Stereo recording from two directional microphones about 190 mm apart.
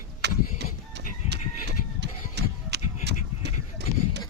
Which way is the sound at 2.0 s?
60° right (ahead or behind).